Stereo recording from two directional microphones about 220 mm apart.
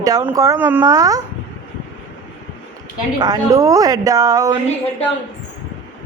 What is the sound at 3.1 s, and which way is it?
Speech, 15° right (ahead or behind).